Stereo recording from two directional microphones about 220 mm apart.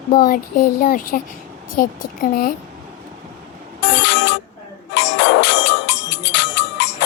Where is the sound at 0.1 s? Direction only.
40° left (ahead or behind).